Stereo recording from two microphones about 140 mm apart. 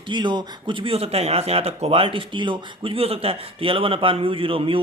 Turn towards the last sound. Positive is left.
turn(degrees=-40)  # may be behind; listen again after turning